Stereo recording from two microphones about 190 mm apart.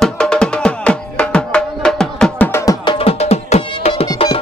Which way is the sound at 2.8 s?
30° left (ahead or behind).